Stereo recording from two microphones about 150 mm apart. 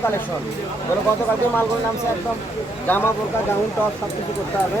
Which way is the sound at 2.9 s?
15° left (ahead or behind).